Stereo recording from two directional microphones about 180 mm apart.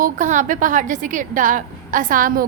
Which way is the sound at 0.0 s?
45° right (ahead or behind).